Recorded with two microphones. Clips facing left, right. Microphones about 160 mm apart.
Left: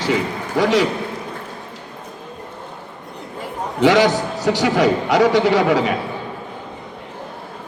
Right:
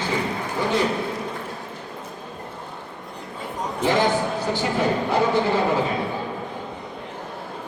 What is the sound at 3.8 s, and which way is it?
A man's voice, 90° left.